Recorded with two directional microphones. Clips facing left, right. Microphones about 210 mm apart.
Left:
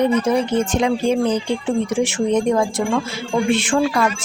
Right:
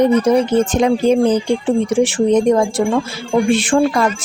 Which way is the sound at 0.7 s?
40° right (ahead or behind).